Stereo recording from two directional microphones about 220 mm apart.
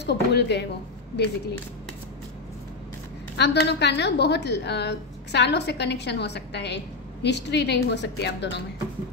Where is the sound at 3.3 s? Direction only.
50° left (ahead or behind).